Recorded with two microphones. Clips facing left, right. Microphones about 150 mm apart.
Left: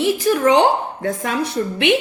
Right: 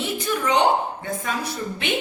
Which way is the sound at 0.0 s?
90° left.